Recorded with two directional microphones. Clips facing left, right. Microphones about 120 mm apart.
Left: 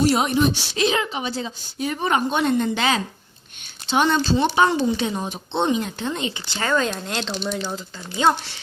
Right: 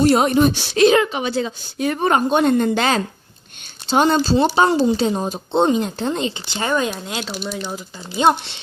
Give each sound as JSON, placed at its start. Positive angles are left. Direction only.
{"t": 0.0, "sound": "a woman's voice", "side_deg": -50}
{"t": 6.5, "sound": "speech", "side_deg": -20}